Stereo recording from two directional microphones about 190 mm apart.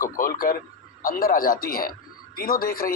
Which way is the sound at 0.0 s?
50° left (ahead or behind).